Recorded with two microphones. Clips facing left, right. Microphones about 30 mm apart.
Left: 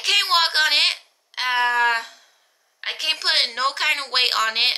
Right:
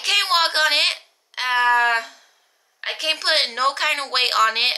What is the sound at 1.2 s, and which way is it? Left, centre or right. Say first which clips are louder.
Wail: right 2 dB; centre.